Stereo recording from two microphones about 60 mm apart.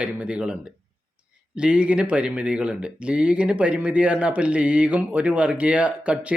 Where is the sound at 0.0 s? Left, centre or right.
Centre.